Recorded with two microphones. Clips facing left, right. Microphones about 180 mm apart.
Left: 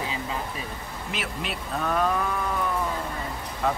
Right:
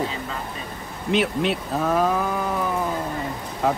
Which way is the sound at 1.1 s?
Centre (ahead or behind).